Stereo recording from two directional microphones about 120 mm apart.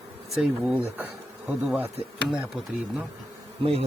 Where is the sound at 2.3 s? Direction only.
5° right (ahead or behind).